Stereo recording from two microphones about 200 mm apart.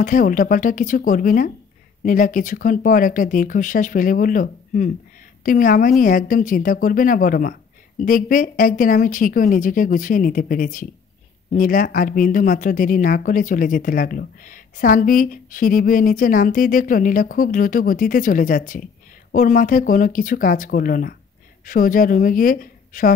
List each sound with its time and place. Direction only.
0.0 s speech: 40° left (ahead or behind)